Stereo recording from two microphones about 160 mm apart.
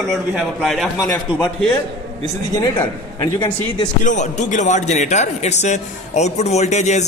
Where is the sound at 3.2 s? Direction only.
30° left (ahead or behind).